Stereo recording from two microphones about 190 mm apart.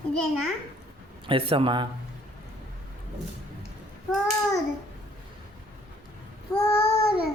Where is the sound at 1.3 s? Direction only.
30° right (ahead or behind).